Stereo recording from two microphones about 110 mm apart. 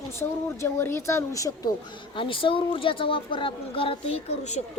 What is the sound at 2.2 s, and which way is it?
Speech, 50° left (ahead or behind).